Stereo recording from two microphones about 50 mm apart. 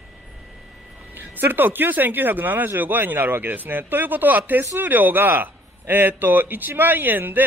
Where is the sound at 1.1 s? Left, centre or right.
Right.